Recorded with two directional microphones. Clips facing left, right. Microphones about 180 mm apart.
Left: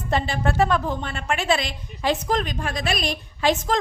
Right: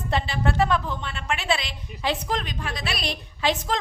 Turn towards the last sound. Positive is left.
turn(degrees=45)  # may be behind; listen again after turning